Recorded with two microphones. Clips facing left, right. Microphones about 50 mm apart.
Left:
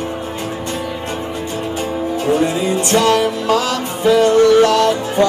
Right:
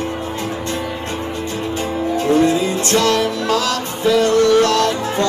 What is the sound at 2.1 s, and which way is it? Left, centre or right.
Music, centre.